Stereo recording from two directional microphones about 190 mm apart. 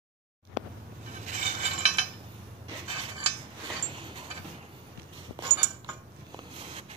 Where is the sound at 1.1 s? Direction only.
40° right (ahead or behind).